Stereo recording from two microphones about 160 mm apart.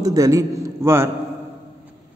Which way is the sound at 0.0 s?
20° right (ahead or behind).